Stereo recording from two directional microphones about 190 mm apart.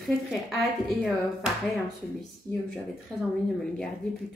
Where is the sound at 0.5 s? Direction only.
Centre (ahead or behind).